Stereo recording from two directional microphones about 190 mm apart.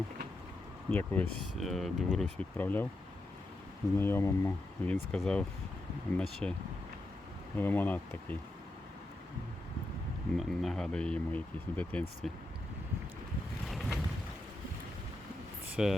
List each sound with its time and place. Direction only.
0.9 s speech: 10° left (ahead or behind)
3.9 s speech: 10° left (ahead or behind)
7.5 s speech: 10° left (ahead or behind)
10.3 s speech: centre (ahead or behind)
13.7 s boat: centre (ahead or behind)
15.7 s speech: 5° right (ahead or behind)